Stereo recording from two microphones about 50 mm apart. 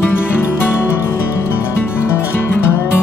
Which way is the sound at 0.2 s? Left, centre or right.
Left.